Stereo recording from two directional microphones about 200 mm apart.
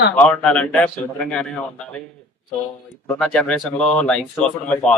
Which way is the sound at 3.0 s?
5° left (ahead or behind).